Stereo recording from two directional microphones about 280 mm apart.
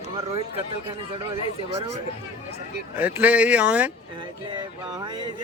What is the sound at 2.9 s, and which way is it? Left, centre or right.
Speech, centre.